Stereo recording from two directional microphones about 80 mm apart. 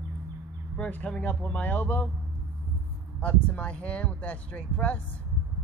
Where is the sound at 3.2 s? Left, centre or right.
Centre.